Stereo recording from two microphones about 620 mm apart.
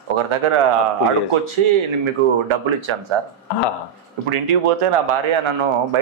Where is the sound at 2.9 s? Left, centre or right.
Right.